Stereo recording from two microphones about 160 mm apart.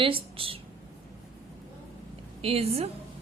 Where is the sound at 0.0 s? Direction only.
35° right (ahead or behind).